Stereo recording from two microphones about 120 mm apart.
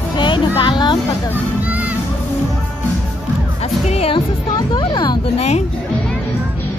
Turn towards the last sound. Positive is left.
turn(degrees=65)  # may be behind; listen again after turning